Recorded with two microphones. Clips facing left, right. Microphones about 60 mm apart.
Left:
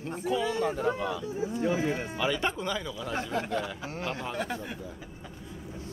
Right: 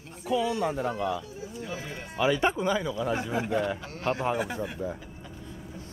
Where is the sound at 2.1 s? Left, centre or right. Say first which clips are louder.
Right 4 dB; centre.